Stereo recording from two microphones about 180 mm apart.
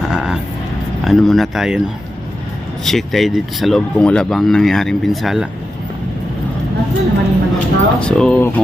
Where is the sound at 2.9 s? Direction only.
Centre (ahead or behind).